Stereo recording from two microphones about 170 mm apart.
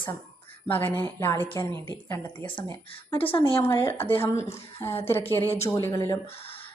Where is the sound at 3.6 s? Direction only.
15° left (ahead or behind).